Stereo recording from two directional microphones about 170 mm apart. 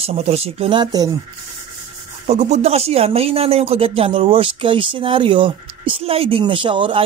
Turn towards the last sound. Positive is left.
turn(degrees=-30)  # may be behind; listen again after turning